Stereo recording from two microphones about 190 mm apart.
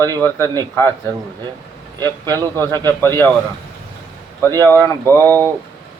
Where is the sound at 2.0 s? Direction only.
15° left (ahead or behind).